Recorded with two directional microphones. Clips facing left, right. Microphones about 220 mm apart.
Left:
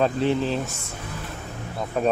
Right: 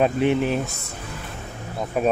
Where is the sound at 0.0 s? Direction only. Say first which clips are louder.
Right 2 dB; 15° right (ahead or behind).